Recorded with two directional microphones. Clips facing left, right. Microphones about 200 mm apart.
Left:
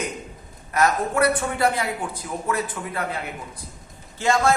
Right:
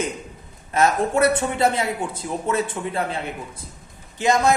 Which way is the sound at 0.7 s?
25° right (ahead or behind).